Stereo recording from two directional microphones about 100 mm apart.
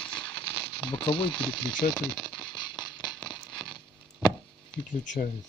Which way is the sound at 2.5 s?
50° left (ahead or behind).